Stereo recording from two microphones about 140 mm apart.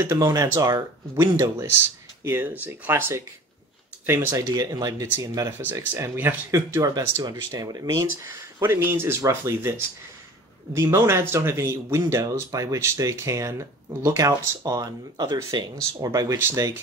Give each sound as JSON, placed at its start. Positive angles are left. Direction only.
{"t": 0.0, "sound": "speech", "side_deg": -25}
{"t": 5.6, "sound": "speech", "side_deg": -15}